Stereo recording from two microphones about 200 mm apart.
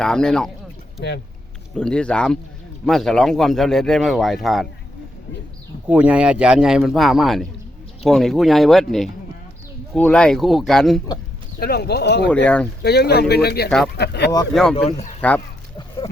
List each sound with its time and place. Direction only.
0.0 s speech: 5° left (ahead or behind)
1.7 s speech: 5° left (ahead or behind)
5.9 s speech: 5° right (ahead or behind)
11.6 s speech: 50° left (ahead or behind)
12.3 s speech: 5° left (ahead or behind)
12.8 s speech: 55° left (ahead or behind)
13.7 s speech: 5° left (ahead or behind)
13.9 s speech: 55° left (ahead or behind)
14.5 s speech: centre (ahead or behind)